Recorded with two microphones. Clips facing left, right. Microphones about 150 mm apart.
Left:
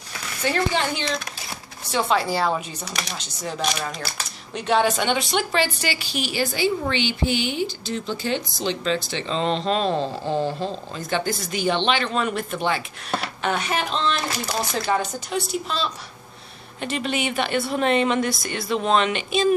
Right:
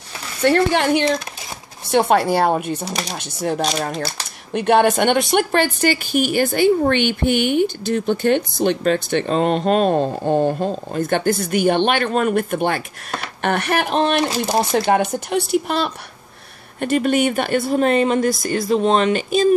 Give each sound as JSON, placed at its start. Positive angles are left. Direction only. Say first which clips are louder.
{"t": 0.4, "sound": "speech", "louder": "right 7 dB", "side_deg": -60}
{"t": 2.8, "sound": "speech", "louder": "right 6 dB", "side_deg": -35}
{"t": 3.2, "sound": "speech", "louder": "right 10 dB", "side_deg": -55}
{"t": 16.8, "sound": "speech", "louder": "right 9 dB", "side_deg": -50}